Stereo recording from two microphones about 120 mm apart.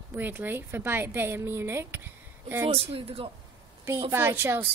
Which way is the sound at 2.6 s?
50° right (ahead or behind).